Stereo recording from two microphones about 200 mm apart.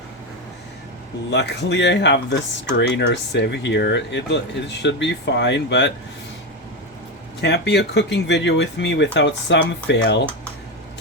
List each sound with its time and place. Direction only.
1.3 s speech: 60° left (ahead or behind)
7.4 s speech: 55° left (ahead or behind)